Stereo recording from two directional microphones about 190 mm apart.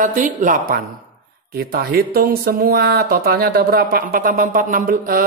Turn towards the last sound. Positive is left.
turn(degrees=-45)  # may be behind; listen again after turning